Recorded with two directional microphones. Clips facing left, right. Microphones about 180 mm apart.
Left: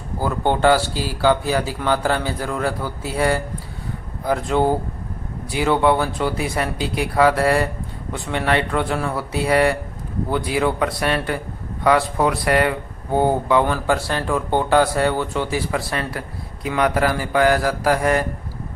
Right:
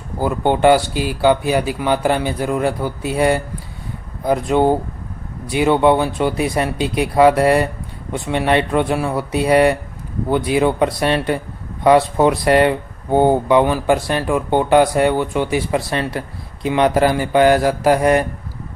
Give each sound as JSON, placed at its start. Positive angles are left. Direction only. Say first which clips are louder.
{"t": 0.2, "sound": "speech", "louder": "right 3 dB", "side_deg": -15}